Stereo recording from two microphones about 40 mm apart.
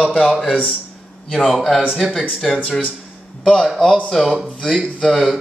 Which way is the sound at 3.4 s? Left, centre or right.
Centre.